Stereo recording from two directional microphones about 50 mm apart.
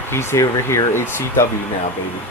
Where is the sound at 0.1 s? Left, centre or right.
Left.